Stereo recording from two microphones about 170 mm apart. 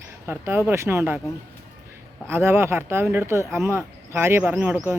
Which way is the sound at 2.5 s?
15° right (ahead or behind).